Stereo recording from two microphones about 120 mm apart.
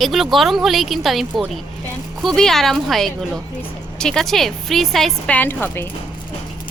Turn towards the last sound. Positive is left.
turn(degrees=20)  # may be behind; listen again after turning